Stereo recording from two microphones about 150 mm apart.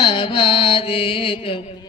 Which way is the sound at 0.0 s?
30° left (ahead or behind).